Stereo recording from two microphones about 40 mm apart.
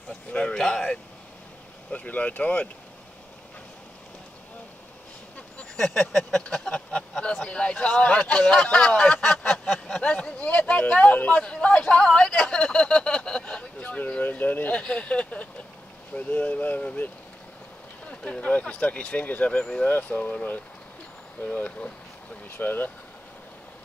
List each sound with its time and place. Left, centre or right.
0.3 s speech: left
0.6 s speech: centre
1.9 s speech: left
5.8 s a sound: centre
6.7 s speech: left
9.7 s a sound: centre
10.0 s speech: left
11.4 s speech: left
13.6 s a sound: left
14.3 s speech: left
14.7 s speech: left
16.1 s speech: left
18.0 s speech: left
22.6 s speech: left